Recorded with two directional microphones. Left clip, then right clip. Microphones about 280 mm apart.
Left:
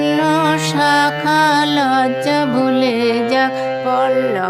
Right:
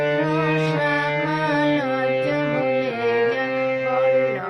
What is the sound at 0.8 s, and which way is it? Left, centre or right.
Music, left.